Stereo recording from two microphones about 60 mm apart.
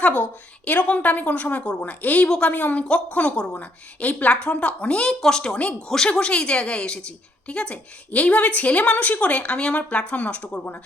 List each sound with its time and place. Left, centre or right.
0.2 s a woman's voice: left
2.2 s a woman's voice: centre
2.5 s a woman's voice: left